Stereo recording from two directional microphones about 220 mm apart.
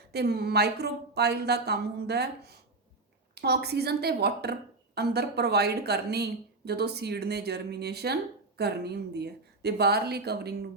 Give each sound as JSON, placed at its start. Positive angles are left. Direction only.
{"t": 0.1, "sound": "a woman's voice", "side_deg": -45}